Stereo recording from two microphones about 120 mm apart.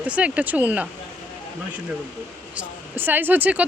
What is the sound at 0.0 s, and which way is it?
Speech, 10° right (ahead or behind).